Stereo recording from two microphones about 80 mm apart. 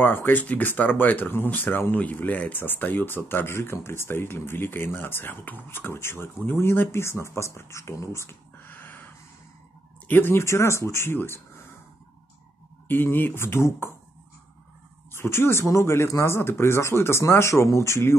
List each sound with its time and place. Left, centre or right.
0.0 s speech: left
12.8 s speech: left
15.1 s speech: left